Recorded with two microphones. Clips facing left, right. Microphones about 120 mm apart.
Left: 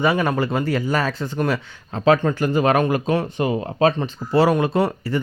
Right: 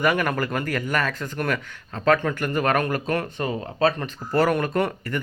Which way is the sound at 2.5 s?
5° left (ahead or behind).